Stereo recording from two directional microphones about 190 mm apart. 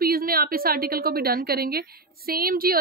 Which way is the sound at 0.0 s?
50° right (ahead or behind).